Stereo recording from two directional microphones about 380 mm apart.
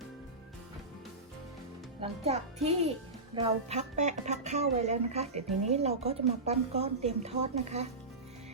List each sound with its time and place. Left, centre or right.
2.0 s speech: centre